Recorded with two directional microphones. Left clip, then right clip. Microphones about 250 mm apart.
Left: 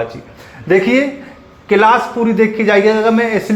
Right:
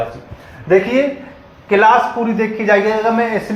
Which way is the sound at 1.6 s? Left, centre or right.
Left.